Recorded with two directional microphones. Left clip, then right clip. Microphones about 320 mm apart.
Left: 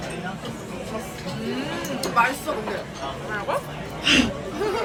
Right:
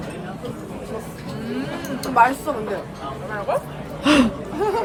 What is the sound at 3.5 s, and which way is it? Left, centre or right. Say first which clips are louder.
Speech: right 4 dB; centre.